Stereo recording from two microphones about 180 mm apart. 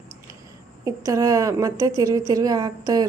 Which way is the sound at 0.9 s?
20° right (ahead or behind).